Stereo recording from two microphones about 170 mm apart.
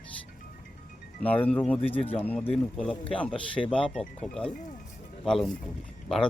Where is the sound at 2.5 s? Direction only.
Centre (ahead or behind).